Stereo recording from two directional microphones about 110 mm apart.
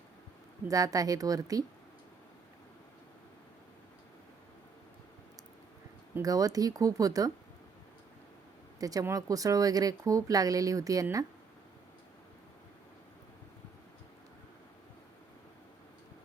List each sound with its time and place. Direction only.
0.7 s speech: 35° right (ahead or behind)
6.2 s speech: 35° right (ahead or behind)
8.8 s speech: 35° right (ahead or behind)